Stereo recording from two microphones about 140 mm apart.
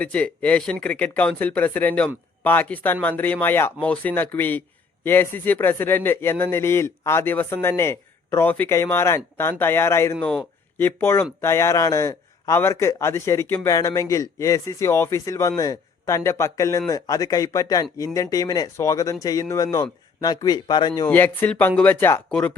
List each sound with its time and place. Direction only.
0.0 s a man's voice: 10° left (ahead or behind); by 21.1 s 30° left (ahead or behind)
21.1 s a man's voice: 10° left (ahead or behind)